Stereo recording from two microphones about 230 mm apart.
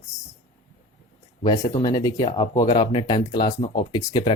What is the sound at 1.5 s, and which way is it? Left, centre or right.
Speech, centre.